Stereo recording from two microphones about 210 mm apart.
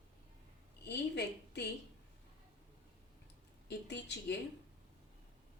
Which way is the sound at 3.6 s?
55° left (ahead or behind).